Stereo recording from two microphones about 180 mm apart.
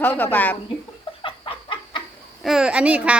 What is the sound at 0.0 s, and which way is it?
Speech, 10° left (ahead or behind).